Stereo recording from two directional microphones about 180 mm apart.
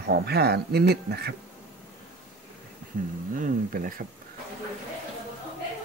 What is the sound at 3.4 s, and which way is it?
Speech, 50° right (ahead or behind).